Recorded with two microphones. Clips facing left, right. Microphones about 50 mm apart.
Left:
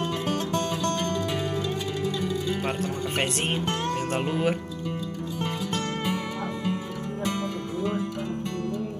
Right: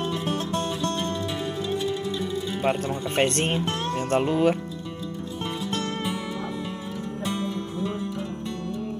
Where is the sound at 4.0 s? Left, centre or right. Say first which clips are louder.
Right 4 dB; centre.